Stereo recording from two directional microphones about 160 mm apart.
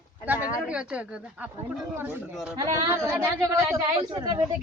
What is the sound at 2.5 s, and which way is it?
A woman's voice, 20° right (ahead or behind).